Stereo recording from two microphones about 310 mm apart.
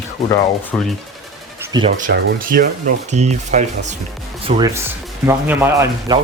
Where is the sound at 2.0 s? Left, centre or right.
Right.